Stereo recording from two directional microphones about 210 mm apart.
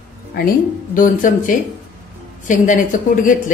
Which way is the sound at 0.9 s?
40° left (ahead or behind).